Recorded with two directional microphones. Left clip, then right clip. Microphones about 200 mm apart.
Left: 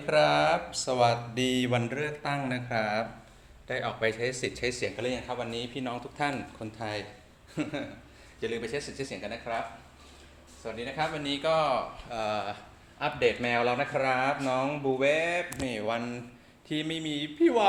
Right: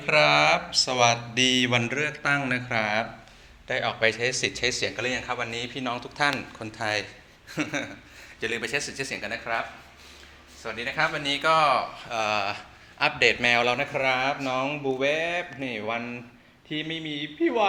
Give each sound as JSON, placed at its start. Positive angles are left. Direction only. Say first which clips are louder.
{"t": 0.0, "sound": "speech", "louder": "right 4 dB", "side_deg": 10}
{"t": 10.6, "sound": "speech", "louder": "right 6 dB", "side_deg": 0}
{"t": 14.9, "sound": "speech", "louder": "even", "side_deg": 10}